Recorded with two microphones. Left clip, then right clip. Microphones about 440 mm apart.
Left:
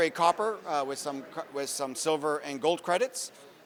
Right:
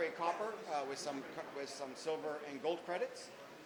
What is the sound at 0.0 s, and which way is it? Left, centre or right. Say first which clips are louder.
A man's voice: left 13 dB; left.